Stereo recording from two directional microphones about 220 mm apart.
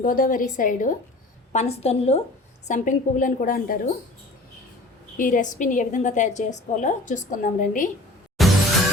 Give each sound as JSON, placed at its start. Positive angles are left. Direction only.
{"t": 0.0, "sound": "a woman's voice", "side_deg": 40}
{"t": 5.1, "sound": "a woman's voice", "side_deg": 35}
{"t": 8.4, "sound": "music", "side_deg": 0}